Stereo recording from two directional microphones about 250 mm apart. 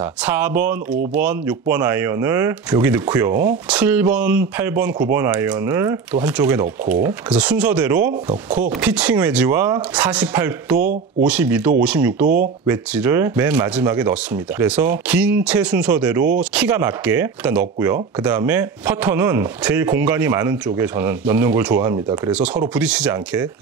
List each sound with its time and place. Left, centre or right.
0.0 s speech: centre
10.8 s speech: right
11.2 s speech: centre